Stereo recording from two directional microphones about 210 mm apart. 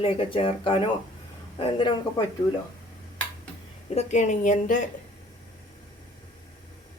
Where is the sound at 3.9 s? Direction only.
30° left (ahead or behind).